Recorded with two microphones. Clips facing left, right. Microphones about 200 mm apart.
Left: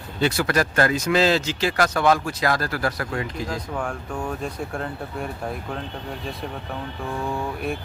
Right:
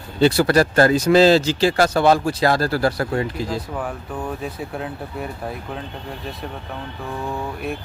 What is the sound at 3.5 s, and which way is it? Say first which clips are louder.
Speech: right 2 dB; 5° right (ahead or behind).